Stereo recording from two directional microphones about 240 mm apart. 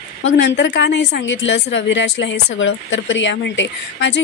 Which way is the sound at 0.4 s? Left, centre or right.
Left.